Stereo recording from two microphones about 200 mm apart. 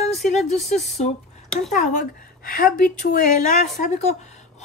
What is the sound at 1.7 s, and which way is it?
A woman's voice, 40° left (ahead or behind).